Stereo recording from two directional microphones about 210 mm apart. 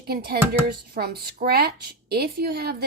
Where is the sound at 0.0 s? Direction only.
45° right (ahead or behind).